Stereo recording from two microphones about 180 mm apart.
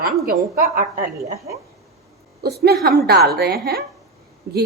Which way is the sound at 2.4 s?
60° right (ahead or behind).